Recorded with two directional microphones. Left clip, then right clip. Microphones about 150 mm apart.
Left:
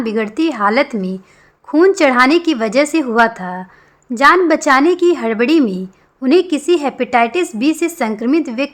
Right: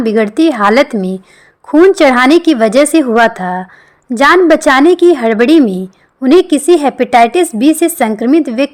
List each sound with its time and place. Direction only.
0.0 s a woman's voice: 35° right (ahead or behind)